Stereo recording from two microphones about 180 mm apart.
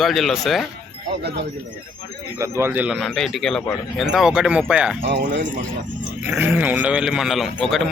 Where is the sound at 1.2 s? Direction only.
70° right (ahead or behind).